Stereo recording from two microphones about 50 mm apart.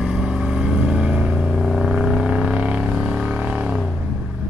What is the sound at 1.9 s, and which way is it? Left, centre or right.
Music, centre.